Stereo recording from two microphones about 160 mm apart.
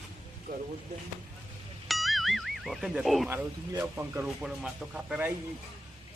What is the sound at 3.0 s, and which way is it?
Speech, centre (ahead or behind).